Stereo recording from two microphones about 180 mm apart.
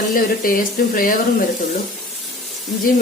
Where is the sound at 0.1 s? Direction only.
50° left (ahead or behind).